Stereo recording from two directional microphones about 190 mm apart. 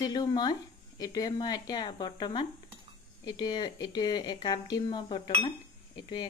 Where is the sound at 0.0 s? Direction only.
20° left (ahead or behind).